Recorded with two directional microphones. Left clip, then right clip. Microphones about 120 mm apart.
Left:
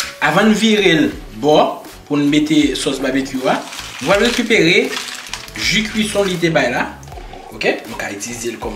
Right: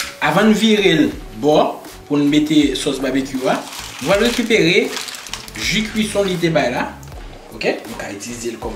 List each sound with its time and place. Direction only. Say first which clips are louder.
0.2 s speech: left 1 dB; 5° right (ahead or behind)